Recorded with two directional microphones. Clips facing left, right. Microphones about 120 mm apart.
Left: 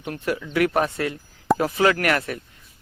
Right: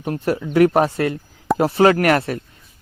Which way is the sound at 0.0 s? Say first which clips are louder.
Right 5 dB; 35° right (ahead or behind).